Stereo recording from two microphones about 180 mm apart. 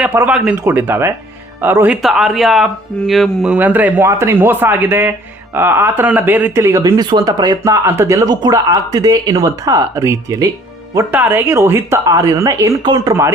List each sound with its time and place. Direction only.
0.0 s speech: 10° right (ahead or behind)